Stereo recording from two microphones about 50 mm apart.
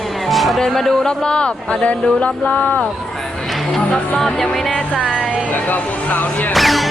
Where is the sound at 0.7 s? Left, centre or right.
Centre; by 2.8 s left.